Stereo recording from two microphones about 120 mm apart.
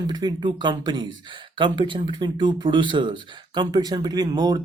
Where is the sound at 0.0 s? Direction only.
35° right (ahead or behind).